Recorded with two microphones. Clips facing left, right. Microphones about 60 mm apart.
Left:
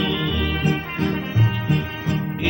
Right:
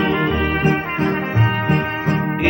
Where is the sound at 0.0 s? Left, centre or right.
Right.